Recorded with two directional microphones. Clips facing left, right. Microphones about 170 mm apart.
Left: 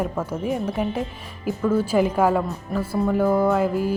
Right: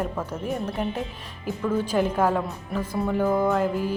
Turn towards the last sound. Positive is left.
turn(degrees=5)  # may be behind; listen again after turning